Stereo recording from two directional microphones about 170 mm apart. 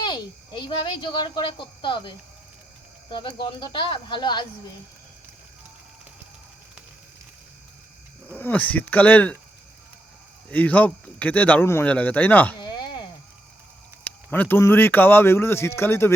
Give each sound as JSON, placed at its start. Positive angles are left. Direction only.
{"t": 0.0, "sound": "speech", "side_deg": 25}
{"t": 8.3, "sound": "speech", "side_deg": 10}
{"t": 10.5, "sound": "speech", "side_deg": 10}
{"t": 12.5, "sound": "a sound", "side_deg": 25}
{"t": 14.0, "sound": "speech", "side_deg": 10}